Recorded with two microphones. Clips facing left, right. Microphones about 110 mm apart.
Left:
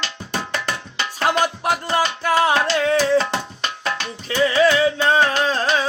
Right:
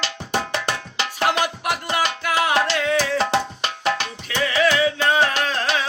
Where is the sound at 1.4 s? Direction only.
35° left (ahead or behind).